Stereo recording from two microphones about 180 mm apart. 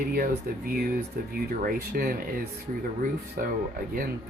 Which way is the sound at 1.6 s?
55° right (ahead or behind).